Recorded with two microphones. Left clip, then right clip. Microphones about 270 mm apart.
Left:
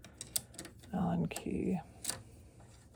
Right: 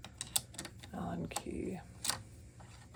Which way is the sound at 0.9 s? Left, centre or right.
Left.